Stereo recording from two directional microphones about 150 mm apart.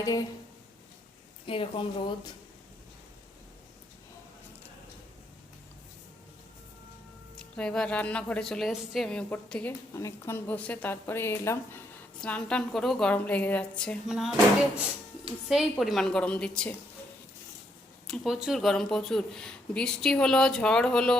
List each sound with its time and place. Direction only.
0.0 s speech: 25° left (ahead or behind)
1.5 s a woman's voice: 35° left (ahead or behind)
7.3 s speech: 5° left (ahead or behind)
15.7 s speech: centre (ahead or behind)
18.1 s speech: centre (ahead or behind)